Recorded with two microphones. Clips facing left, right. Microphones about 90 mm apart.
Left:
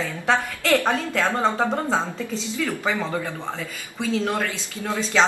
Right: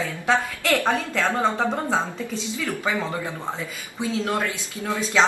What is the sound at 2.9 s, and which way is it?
Speech, 10° right (ahead or behind).